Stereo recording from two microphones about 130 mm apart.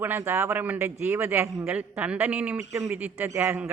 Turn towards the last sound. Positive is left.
turn(degrees=-15)  # may be behind; listen again after turning